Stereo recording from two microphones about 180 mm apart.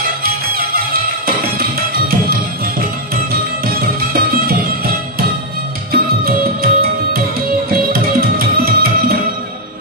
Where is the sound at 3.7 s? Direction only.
55° right (ahead or behind).